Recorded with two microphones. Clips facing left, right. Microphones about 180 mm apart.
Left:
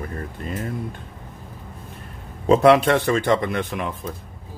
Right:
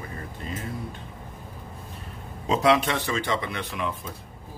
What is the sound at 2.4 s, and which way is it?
Speech, 55° left (ahead or behind).